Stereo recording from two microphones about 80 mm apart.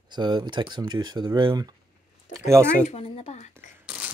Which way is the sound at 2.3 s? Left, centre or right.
Right.